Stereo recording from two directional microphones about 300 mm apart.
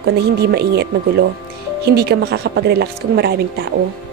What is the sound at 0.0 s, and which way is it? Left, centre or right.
Speech, right.